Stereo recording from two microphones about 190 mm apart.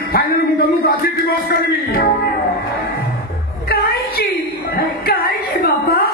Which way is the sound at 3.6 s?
55° left (ahead or behind).